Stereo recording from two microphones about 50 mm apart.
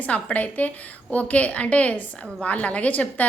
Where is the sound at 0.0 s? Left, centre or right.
Left.